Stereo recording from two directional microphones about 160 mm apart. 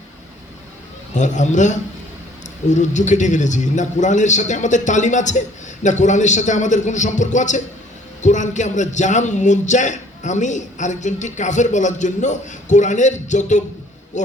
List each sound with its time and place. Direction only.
1.1 s a man's voice: 50° left (ahead or behind)